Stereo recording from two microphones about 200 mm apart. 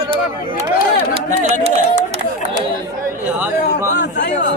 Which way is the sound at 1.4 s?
35° right (ahead or behind).